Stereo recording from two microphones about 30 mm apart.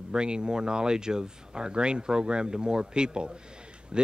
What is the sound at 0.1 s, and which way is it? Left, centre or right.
A man's voice, right.